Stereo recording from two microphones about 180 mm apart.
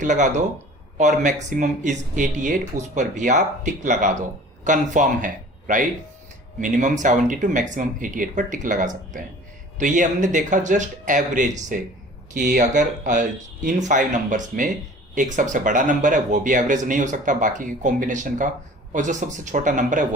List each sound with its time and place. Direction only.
0.0 s speech: 45° right (ahead or behind)